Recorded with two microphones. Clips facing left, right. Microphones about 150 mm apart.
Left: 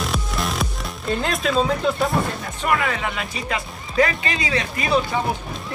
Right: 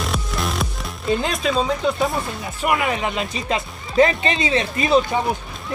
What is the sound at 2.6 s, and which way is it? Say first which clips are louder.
Speech: right 2 dB; 20° right (ahead or behind).